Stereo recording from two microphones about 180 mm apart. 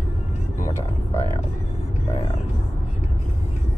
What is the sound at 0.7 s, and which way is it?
Vehicle, 15° left (ahead or behind).